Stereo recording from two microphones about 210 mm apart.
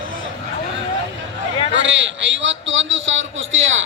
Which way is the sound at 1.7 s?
60° right (ahead or behind).